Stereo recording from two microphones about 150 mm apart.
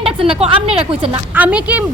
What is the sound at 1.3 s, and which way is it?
Speech, 10° right (ahead or behind).